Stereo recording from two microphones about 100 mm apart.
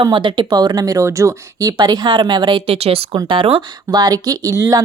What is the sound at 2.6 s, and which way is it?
Speech, 75° right (ahead or behind).